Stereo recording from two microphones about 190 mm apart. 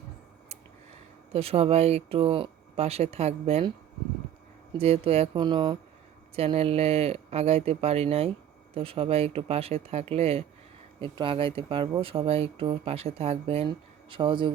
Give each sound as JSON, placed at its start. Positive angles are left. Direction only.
{"t": 1.3, "sound": "speech", "side_deg": -30}
{"t": 4.8, "sound": "speech", "side_deg": -30}